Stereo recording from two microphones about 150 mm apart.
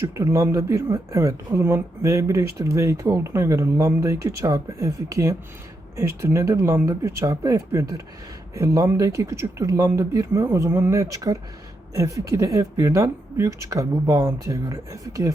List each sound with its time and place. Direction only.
0.0 s speech: 20° right (ahead or behind)